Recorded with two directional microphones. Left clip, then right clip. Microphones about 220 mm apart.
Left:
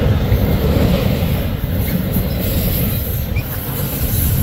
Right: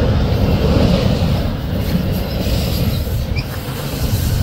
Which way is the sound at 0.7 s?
30° left (ahead or behind).